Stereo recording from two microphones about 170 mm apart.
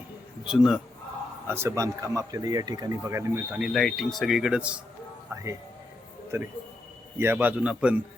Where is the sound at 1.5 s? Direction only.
15° right (ahead or behind).